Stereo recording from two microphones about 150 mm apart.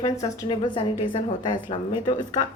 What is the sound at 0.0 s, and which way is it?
A woman's voice, 25° left (ahead or behind).